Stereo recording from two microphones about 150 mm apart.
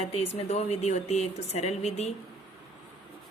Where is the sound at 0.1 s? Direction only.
45° left (ahead or behind).